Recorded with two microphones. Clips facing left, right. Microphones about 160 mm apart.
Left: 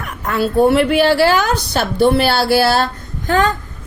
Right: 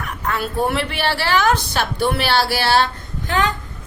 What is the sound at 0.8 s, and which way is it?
Speech, 45° left (ahead or behind).